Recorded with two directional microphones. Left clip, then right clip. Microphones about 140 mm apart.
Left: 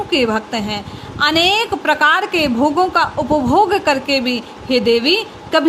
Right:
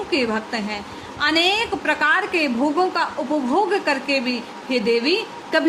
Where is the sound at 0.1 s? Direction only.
35° left (ahead or behind).